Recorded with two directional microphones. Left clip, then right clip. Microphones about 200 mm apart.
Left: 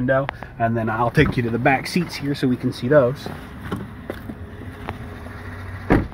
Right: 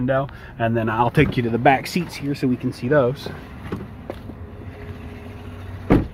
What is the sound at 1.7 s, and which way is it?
Speech, 5° right (ahead or behind).